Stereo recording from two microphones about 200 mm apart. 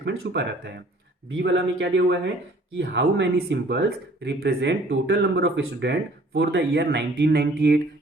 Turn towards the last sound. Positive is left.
turn(degrees=-55)  # may be behind; listen again after turning